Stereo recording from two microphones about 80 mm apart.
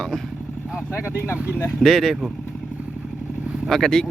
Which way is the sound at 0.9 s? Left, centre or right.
Left.